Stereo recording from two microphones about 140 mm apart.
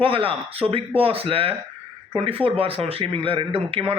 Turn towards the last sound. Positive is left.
turn(degrees=-40)  # may be behind; listen again after turning